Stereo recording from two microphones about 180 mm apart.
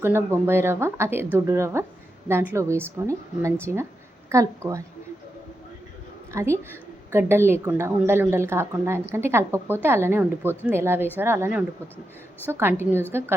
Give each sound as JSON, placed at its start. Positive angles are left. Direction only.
{"t": 0.0, "sound": "a woman's voice", "side_deg": -15}
{"t": 6.3, "sound": "a woman's voice", "side_deg": -15}